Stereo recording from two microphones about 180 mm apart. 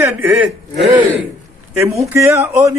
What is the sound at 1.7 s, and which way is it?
A man's voice, 15° right (ahead or behind).